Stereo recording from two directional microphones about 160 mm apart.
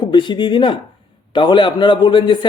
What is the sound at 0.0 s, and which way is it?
A man's voice, 30° left (ahead or behind).